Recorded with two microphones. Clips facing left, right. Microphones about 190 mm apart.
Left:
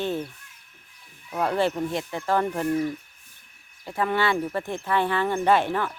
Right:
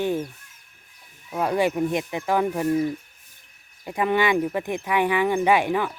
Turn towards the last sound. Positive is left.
turn(degrees=-10)  # may be behind; listen again after turning